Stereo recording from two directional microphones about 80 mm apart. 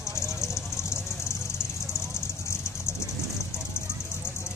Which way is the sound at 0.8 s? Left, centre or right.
Left.